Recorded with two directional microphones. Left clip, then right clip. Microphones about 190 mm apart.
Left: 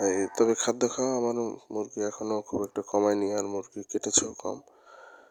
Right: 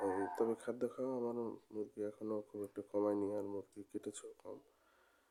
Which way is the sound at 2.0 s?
45° left (ahead or behind).